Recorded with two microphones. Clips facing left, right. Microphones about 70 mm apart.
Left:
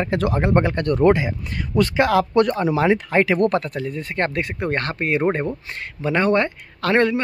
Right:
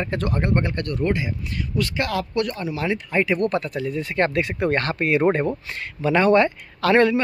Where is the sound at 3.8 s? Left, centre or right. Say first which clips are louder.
Right 2 dB; left.